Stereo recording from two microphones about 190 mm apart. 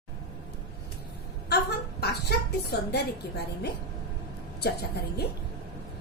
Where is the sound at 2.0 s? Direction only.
60° left (ahead or behind).